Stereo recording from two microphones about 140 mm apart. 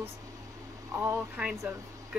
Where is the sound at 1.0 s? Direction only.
15° right (ahead or behind).